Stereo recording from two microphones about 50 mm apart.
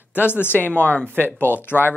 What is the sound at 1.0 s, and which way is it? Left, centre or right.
Speech, right.